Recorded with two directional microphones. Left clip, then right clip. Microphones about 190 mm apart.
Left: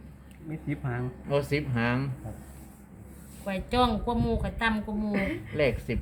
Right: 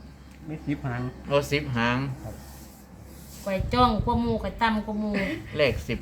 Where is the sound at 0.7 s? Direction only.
15° right (ahead or behind).